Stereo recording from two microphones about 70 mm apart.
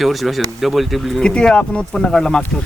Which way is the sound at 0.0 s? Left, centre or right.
Centre.